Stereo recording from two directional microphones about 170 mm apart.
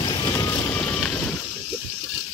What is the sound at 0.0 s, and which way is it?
Vehicle, 25° left (ahead or behind).